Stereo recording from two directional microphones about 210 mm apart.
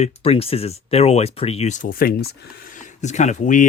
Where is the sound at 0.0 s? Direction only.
30° left (ahead or behind).